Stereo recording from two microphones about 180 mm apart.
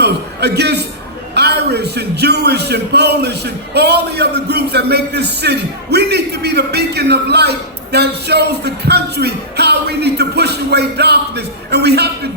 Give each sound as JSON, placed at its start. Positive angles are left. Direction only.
{"t": 0.0, "sound": "a man's voice", "side_deg": -65}
{"t": 7.9, "sound": "music", "side_deg": -65}